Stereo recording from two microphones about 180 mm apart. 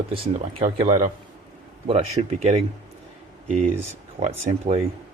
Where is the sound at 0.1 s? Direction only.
35° right (ahead or behind).